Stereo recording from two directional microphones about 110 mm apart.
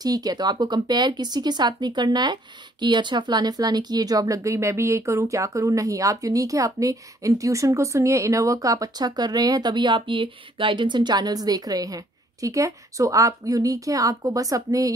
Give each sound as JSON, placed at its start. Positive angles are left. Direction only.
{"t": 0.0, "sound": "speech", "side_deg": -35}